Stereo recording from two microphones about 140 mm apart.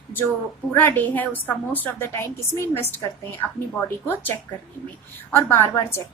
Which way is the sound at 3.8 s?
15° left (ahead or behind).